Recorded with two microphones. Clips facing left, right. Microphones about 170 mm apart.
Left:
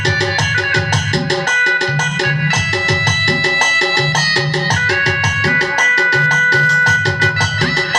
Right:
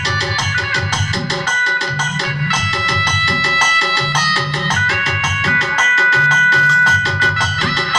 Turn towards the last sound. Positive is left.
turn(degrees=45)  # may be behind; listen again after turning